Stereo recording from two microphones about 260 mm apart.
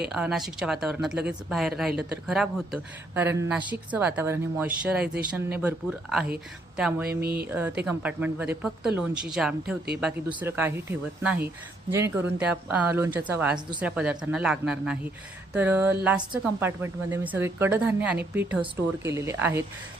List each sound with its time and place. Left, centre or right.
0.1 s speech: centre
7.1 s speech: right
7.4 s speech: centre